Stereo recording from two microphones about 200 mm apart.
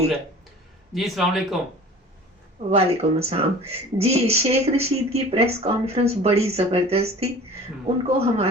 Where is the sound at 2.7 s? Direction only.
30° right (ahead or behind).